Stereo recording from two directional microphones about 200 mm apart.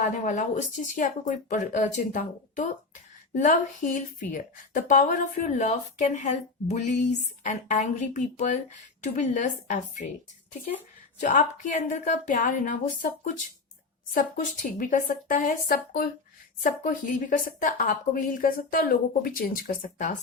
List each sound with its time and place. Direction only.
0.0 s speech: 40° left (ahead or behind)
11.2 s a woman's voice: 40° left (ahead or behind)